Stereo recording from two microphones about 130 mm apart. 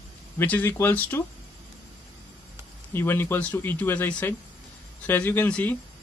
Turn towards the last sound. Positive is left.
turn(degrees=10)  # may be behind; listen again after turning